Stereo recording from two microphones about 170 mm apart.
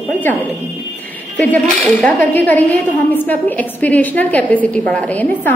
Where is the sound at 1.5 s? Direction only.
10° left (ahead or behind).